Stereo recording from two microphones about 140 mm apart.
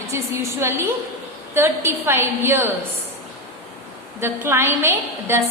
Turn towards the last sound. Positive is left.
turn(degrees=-15)  # may be behind; listen again after turning